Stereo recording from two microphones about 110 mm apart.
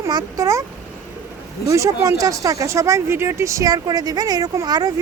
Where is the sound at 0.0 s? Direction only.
35° right (ahead or behind).